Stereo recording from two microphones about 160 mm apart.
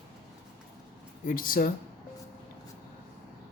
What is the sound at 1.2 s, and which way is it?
Speech, 60° left (ahead or behind).